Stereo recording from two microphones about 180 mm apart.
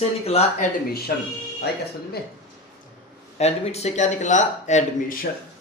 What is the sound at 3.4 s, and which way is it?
Speech, 35° left (ahead or behind).